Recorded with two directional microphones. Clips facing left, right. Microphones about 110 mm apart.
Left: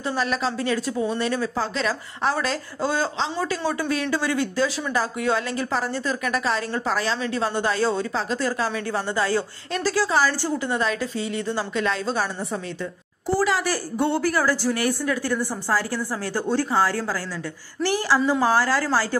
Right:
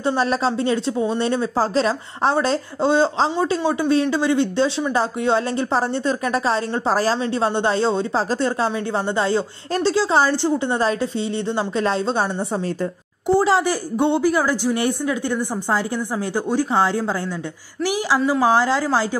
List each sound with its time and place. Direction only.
0.0 s speech: 30° right (ahead or behind)
13.3 s a woman's voice: 25° right (ahead or behind)